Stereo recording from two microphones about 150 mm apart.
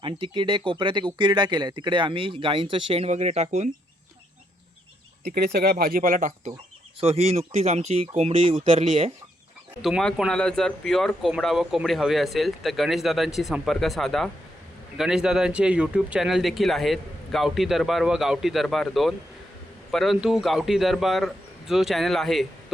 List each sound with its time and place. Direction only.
0.0 s speech: 35° right (ahead or behind); by 3.7 s 50° right (ahead or behind)
5.2 s speech: 90° right; by 6.5 s 60° right (ahead or behind)
7.0 s speech: 40° right (ahead or behind)
9.8 s speech: centre (ahead or behind)